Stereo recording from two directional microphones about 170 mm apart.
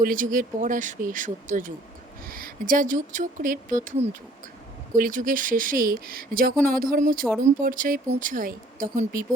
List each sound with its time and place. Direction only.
0.0 s speech: 55° right (ahead or behind)